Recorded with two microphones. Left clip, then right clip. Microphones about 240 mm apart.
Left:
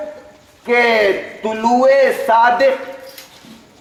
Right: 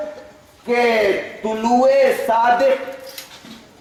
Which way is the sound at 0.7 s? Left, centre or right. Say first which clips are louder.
Left 3 dB; left.